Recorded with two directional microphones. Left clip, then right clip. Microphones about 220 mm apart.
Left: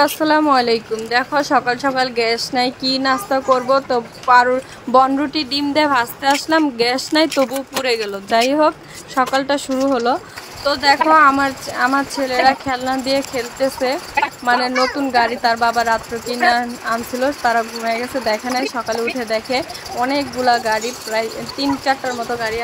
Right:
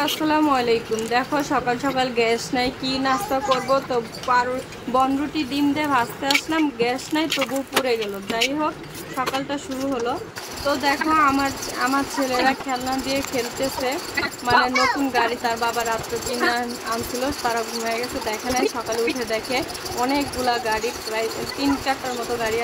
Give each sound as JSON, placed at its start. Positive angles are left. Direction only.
{"t": 0.0, "sound": "speech", "side_deg": 25}
{"t": 14.4, "sound": "speech", "side_deg": 20}